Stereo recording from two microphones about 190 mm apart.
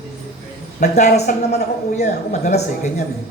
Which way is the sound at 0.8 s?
40° left (ahead or behind).